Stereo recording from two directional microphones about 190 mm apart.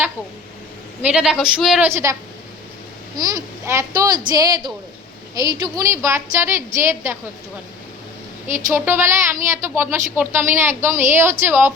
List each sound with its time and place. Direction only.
1.0 s a woman's voice: 5° right (ahead or behind)
1.9 s a woman's voice: 15° right (ahead or behind)
3.2 s a woman's voice: 20° right (ahead or behind)
8.7 s a woman's voice: 10° right (ahead or behind)